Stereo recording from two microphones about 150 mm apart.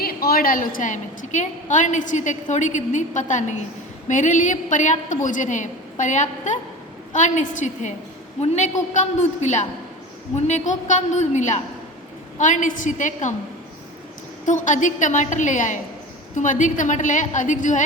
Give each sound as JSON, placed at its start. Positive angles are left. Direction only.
{"t": 0.0, "sound": "a woman's voice", "side_deg": 90}
{"t": 14.4, "sound": "a woman's voice", "side_deg": 55}